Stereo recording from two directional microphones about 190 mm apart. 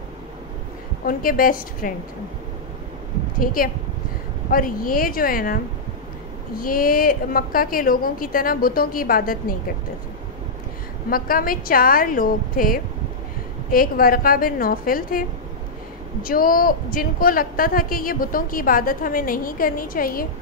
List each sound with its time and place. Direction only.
1.0 s a woman's voice: 50° left (ahead or behind)
3.3 s a woman's voice: 50° left (ahead or behind)
11.1 s a woman's voice: 50° left (ahead or behind)